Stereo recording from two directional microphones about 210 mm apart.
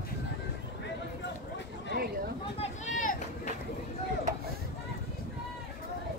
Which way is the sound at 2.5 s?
30° left (ahead or behind).